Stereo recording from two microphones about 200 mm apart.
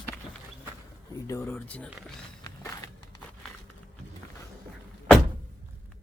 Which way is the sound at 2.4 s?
15° left (ahead or behind).